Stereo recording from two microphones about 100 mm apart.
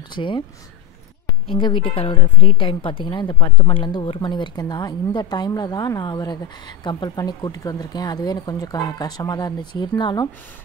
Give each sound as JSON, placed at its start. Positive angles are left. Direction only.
{"t": 0.1, "sound": "speech", "side_deg": 55}
{"t": 1.5, "sound": "a woman's voice", "side_deg": 60}